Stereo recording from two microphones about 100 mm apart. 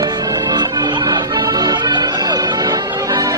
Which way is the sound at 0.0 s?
40° right (ahead or behind).